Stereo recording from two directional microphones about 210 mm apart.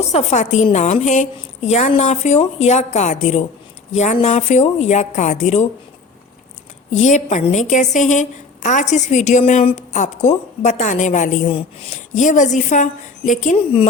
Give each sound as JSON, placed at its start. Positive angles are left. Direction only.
{"t": 0.1, "sound": "a woman's voice", "side_deg": 30}
{"t": 6.9, "sound": "a woman's voice", "side_deg": 35}